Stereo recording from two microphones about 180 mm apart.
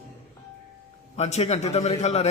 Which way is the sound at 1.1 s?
35° left (ahead or behind).